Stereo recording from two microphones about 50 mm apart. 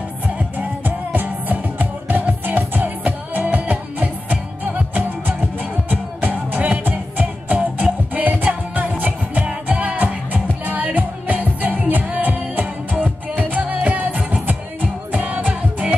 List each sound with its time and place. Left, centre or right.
0.4 s music: right
9.5 s music: right